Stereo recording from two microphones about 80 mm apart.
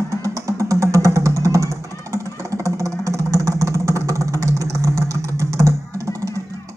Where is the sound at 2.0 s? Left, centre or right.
Right.